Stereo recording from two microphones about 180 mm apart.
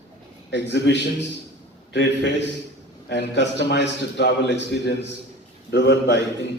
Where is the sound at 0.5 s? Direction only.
80° left.